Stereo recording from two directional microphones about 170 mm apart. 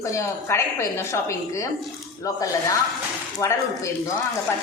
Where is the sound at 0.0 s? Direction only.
15° left (ahead or behind).